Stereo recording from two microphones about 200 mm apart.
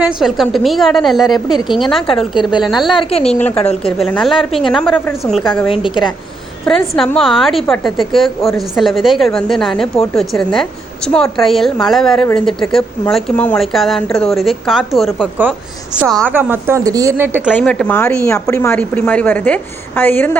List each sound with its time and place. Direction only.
0.0 s a woman's voice: 5° right (ahead or behind)
2.9 s speech: 30° left (ahead or behind)
3.9 s a woman's voice: centre (ahead or behind)
4.4 s a woman's voice: 25° left (ahead or behind)
4.7 s a woman's voice: centre (ahead or behind)
5.9 s a woman's voice: 20° left (ahead or behind)
6.7 s a woman's voice: centre (ahead or behind)
16.3 s speech: 10° right (ahead or behind)
17.5 s a woman's voice: 5° left (ahead or behind)